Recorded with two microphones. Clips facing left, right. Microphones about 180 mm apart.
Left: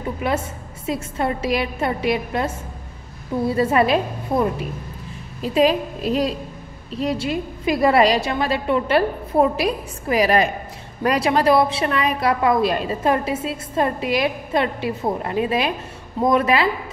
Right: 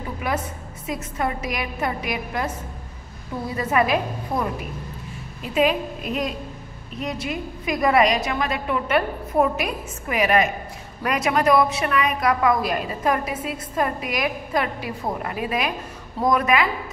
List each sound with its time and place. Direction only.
0.2 s a woman's voice: 25° left (ahead or behind)